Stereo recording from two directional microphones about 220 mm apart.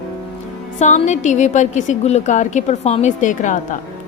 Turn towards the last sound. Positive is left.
turn(degrees=35)  # may be behind; listen again after turning